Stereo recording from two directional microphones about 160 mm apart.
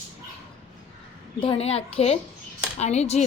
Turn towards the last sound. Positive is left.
turn(degrees=45)  # may be behind; listen again after turning